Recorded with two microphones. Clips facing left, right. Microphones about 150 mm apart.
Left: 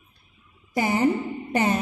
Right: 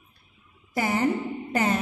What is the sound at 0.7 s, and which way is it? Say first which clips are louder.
A woman's voice: left 3 dB; 20° left (ahead or behind).